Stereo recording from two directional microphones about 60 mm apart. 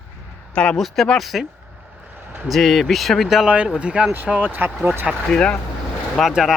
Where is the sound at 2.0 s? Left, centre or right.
Right.